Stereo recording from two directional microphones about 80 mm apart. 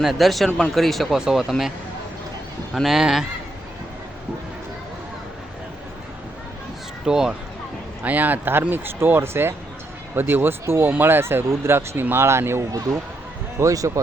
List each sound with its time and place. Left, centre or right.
0.0 s speech: centre
2.7 s speech: centre
7.0 s speech: centre
8.0 s speech: right
13.6 s speech: right